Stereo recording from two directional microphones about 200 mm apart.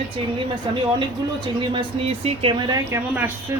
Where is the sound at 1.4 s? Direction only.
25° right (ahead or behind).